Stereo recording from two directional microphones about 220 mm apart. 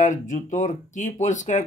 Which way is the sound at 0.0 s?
35° left (ahead or behind).